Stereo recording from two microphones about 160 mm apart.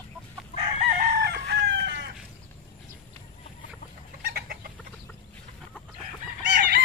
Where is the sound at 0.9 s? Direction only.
75° right (ahead or behind); by 2.0 s 90° right.